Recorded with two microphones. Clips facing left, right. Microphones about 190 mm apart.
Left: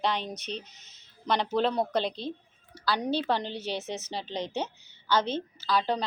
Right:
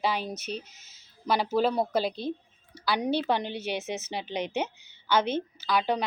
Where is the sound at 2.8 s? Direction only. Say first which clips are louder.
Right 1 dB; 15° right (ahead or behind).